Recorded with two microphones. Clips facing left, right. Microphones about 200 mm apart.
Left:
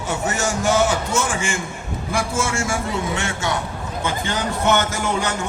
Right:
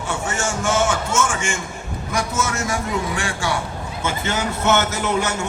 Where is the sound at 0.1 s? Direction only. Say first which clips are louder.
Left 2 dB; 40° left (ahead or behind).